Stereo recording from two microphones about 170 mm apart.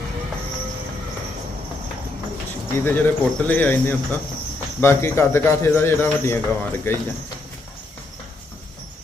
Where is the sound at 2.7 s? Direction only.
10° left (ahead or behind).